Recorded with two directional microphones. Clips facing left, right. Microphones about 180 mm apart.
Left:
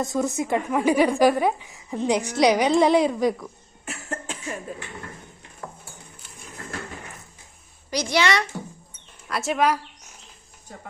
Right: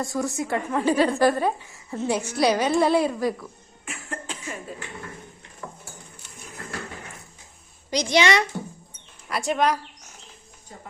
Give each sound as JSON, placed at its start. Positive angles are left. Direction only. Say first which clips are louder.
{"t": 0.0, "sound": "a woman's voice", "louder": "left 2 dB", "side_deg": 20}
{"t": 3.8, "sound": "cough", "louder": "left 2 dB", "side_deg": 40}
{"t": 7.9, "sound": "a woman's voice", "louder": "right 2 dB", "side_deg": -20}
{"t": 9.3, "sound": "speech", "louder": "left 1 dB", "side_deg": 0}